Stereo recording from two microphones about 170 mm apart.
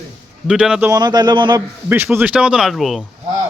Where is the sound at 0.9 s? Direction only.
25° right (ahead or behind).